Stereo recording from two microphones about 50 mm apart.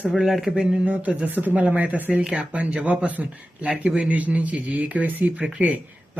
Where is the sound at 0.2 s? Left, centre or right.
Centre.